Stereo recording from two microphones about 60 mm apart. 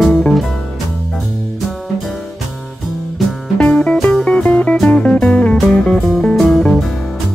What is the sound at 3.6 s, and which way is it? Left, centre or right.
Music, centre.